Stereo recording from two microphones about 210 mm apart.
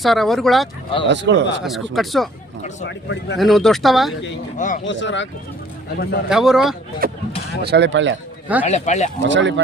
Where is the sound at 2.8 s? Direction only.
60° left (ahead or behind).